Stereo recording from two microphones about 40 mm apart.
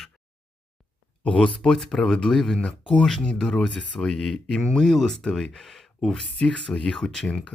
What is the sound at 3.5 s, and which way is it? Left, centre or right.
Speech, left.